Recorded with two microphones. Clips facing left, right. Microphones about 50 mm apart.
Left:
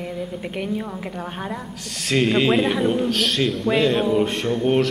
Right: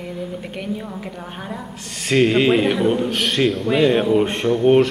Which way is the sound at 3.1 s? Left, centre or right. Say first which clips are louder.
Right 2 dB; centre.